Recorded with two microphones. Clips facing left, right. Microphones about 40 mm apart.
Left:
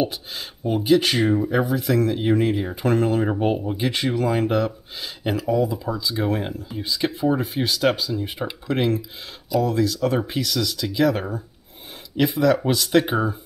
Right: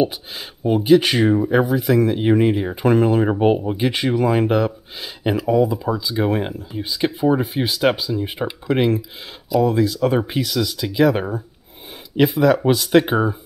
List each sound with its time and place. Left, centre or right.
0.0 s speech: centre